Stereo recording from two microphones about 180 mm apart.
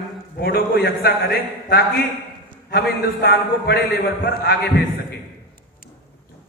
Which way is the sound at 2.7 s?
65° left (ahead or behind).